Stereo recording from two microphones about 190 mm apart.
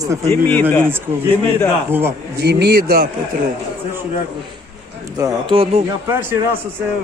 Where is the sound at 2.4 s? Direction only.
60° right (ahead or behind).